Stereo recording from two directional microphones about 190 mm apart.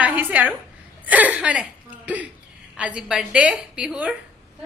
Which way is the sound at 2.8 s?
5° right (ahead or behind).